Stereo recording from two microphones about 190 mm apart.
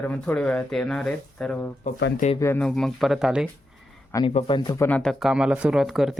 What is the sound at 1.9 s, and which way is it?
Speech, 65° left (ahead or behind).